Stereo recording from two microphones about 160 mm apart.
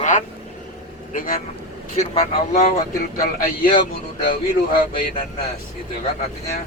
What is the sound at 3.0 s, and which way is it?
Speech, 65° left (ahead or behind).